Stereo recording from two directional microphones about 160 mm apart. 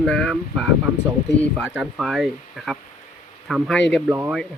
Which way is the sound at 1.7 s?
5° right (ahead or behind).